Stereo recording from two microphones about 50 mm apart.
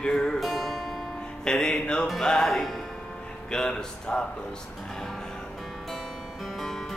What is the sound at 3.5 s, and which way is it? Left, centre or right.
Speech, centre.